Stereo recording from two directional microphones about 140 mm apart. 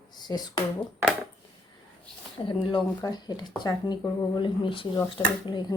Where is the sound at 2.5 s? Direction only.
35° left (ahead or behind).